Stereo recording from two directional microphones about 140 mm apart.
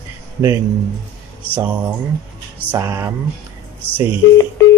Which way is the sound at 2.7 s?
20° right (ahead or behind).